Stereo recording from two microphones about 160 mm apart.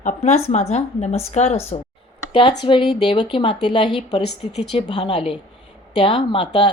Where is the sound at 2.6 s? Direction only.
30° left (ahead or behind).